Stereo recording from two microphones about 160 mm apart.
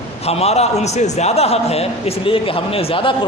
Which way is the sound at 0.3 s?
40° left (ahead or behind).